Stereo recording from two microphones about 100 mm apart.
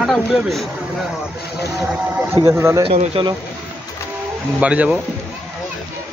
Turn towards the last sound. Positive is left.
turn(degrees=-15)  # may be behind; listen again after turning